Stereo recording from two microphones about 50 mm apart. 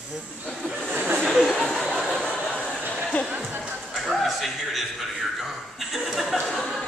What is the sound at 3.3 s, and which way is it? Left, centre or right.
Music, right.